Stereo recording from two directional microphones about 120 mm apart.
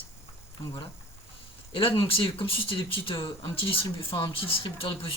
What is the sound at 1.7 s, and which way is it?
Speech, 50° left (ahead or behind).